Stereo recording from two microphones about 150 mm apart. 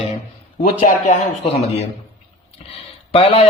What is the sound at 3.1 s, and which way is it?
Speech, 40° left (ahead or behind).